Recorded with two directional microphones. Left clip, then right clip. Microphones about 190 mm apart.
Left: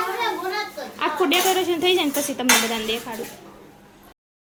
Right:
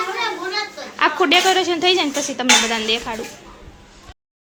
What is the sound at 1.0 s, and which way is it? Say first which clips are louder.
Speech: right 5 dB; 5° right (ahead or behind).